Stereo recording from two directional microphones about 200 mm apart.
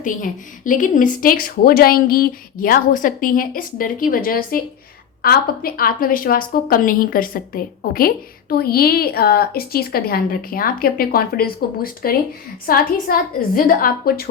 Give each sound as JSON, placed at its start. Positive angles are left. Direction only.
{"t": 0.0, "sound": "a woman's voice", "side_deg": 40}